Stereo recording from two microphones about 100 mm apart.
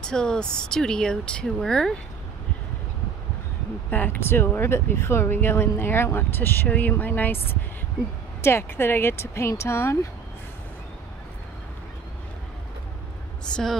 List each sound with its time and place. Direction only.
0.0 s speech: 5° left (ahead or behind)
3.9 s speech: 20° left (ahead or behind)
13.5 s a woman's voice: 5° left (ahead or behind)